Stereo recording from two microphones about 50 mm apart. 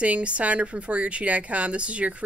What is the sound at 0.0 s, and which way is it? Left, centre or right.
Speech, right.